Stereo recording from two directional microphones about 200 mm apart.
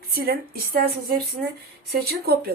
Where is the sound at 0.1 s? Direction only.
50° right (ahead or behind).